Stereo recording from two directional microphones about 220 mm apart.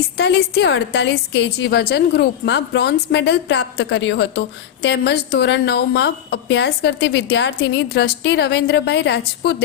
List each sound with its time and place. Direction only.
0.2 s a woman's voice: 50° left (ahead or behind)